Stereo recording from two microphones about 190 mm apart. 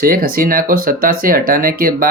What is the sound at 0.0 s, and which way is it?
Speech, 50° right (ahead or behind).